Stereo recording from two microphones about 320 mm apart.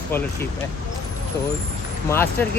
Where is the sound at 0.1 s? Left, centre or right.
Centre.